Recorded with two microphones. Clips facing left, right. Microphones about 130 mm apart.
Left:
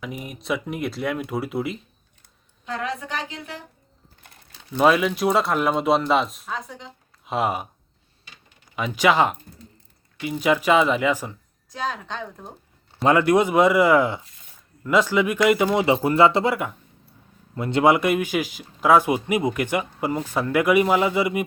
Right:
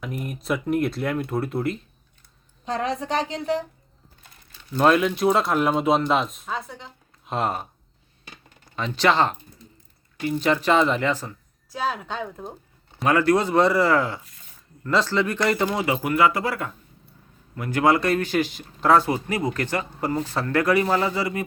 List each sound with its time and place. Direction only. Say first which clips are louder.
0.0 s a man's voice: right 2 dB; centre (ahead or behind)
2.6 s a woman's voice: right 3 dB; 35° right (ahead or behind)
4.7 s a man's voice: even; 5° left (ahead or behind)
8.7 s a man's voice: left 1 dB; 10° left (ahead or behind)
11.7 s speech: right 2 dB; 5° right (ahead or behind)
13.1 s a man's voice: left 2 dB; 20° left (ahead or behind)